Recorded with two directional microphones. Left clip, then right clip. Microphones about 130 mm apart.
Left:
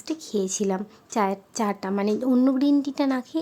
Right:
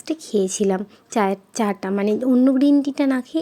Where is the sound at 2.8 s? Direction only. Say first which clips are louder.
Right 4 dB; 25° right (ahead or behind).